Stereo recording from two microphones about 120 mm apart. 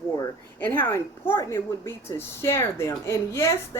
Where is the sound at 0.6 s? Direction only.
15° left (ahead or behind).